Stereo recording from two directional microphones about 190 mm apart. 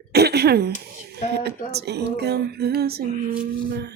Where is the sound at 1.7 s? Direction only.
60° right (ahead or behind).